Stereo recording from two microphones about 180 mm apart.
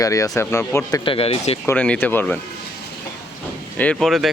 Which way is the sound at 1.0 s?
30° left (ahead or behind).